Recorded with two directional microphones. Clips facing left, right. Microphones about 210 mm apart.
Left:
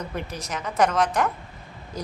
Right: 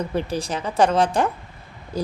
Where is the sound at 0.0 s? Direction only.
30° right (ahead or behind).